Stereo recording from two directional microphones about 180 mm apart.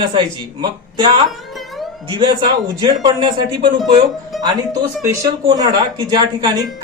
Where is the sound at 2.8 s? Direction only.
25° right (ahead or behind).